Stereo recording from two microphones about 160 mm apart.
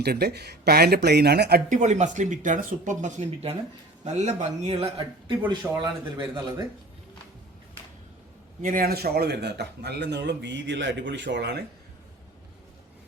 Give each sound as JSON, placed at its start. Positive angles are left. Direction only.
{"t": 0.0, "sound": "speech", "side_deg": -80}
{"t": 1.8, "sound": "a man's voice", "side_deg": -45}
{"t": 8.6, "sound": "speech", "side_deg": -65}